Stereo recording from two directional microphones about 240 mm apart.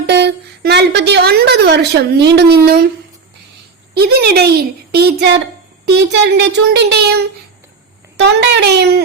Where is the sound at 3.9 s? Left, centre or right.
Right.